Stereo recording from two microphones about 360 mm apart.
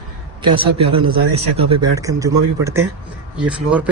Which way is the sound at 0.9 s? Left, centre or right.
Centre.